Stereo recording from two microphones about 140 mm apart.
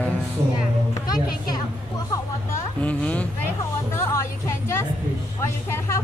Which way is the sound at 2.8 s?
10° left (ahead or behind).